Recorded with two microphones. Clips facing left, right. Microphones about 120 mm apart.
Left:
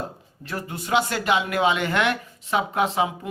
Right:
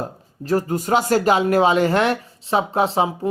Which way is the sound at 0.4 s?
40° right (ahead or behind).